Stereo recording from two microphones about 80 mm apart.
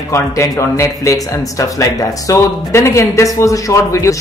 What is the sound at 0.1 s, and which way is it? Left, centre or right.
Speech, left.